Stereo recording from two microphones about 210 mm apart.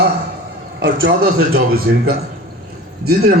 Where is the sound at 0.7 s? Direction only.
60° right (ahead or behind).